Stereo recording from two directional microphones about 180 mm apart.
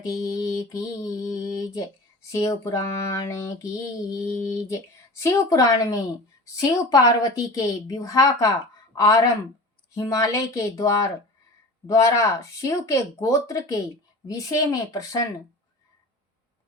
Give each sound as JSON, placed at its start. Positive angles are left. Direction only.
{"t": 0.0, "sound": "a woman's voice", "side_deg": 20}